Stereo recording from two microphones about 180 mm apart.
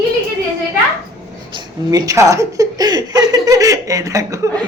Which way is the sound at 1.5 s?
20° right (ahead or behind).